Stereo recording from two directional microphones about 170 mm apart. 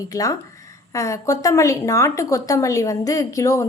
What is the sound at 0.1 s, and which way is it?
Speech, 20° left (ahead or behind).